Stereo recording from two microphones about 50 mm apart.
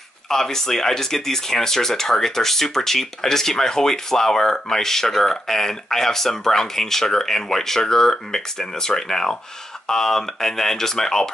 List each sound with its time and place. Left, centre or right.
0.3 s speech: centre